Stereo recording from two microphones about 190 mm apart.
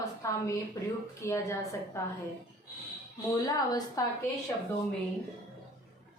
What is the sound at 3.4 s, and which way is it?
Speech, 20° left (ahead or behind).